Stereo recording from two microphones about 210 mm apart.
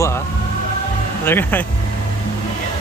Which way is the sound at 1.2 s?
10° left (ahead or behind).